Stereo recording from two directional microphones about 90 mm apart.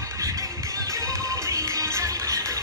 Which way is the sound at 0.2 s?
40° right (ahead or behind).